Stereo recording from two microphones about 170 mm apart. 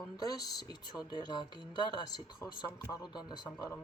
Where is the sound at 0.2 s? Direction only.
20° left (ahead or behind).